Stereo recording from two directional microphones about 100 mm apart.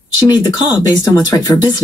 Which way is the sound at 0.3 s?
45° left (ahead or behind).